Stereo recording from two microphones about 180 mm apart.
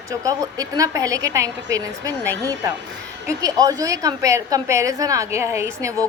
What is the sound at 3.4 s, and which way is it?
A woman's voice, 20° right (ahead or behind).